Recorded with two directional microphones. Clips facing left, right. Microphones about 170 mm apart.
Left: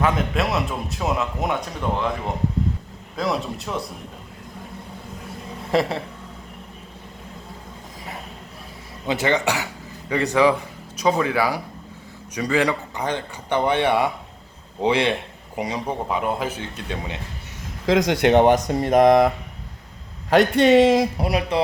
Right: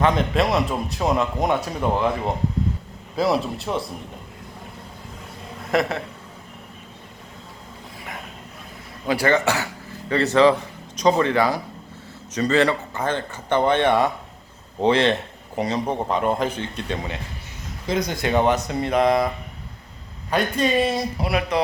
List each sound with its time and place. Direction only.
0.0 s a man's voice: 5° left (ahead or behind)
3.2 s a man's voice: centre (ahead or behind)
5.7 s speech: 30° left (ahead or behind)
9.0 s a man's voice: 20° left (ahead or behind)
17.8 s speech: 90° left; by 18.4 s 70° left (ahead or behind)
18.7 s speech: 40° left (ahead or behind)
20.3 s speech: 75° left (ahead or behind)
21.2 s speech: 35° left (ahead or behind)